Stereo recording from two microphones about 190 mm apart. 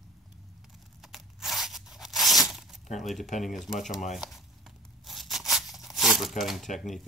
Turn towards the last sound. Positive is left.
turn(degrees=0)  # may be behind; listen again after turning